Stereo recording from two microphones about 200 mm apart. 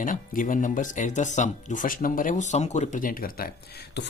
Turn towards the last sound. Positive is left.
turn(degrees=50)  # may be behind; listen again after turning